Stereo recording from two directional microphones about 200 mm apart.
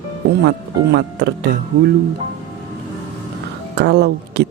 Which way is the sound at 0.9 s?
55° right (ahead or behind).